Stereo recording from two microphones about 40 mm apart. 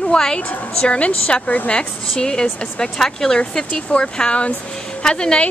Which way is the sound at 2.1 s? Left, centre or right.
Centre.